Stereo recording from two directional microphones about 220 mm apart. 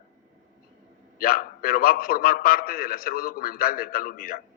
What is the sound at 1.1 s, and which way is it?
Speech, 40° left (ahead or behind).